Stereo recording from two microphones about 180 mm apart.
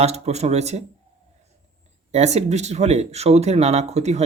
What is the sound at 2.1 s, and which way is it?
Speech, 40° right (ahead or behind).